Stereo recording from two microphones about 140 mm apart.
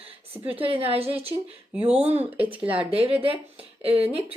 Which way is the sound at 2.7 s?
40° right (ahead or behind).